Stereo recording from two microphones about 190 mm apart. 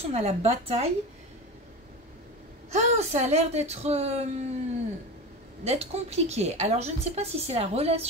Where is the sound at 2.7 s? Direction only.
35° right (ahead or behind).